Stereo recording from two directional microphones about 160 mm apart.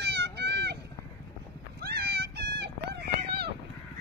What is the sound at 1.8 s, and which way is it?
Cat, 85° right.